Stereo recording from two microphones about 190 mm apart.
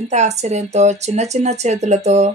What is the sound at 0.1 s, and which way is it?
Speech, 35° right (ahead or behind).